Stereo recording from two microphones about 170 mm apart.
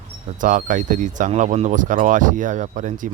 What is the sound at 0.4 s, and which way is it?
Speech, 50° right (ahead or behind).